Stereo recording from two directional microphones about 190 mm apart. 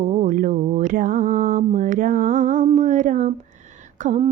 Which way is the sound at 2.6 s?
35° right (ahead or behind).